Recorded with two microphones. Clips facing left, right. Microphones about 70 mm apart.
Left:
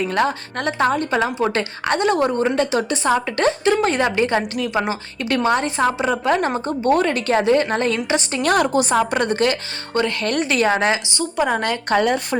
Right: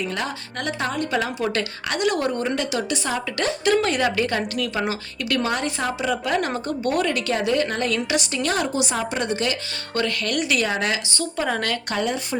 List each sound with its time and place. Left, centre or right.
0.0 s a woman's voice: left
8.4 s speech: left
9.9 s a woman's voice: left
11.2 s a woman's voice: centre
11.9 s speech: left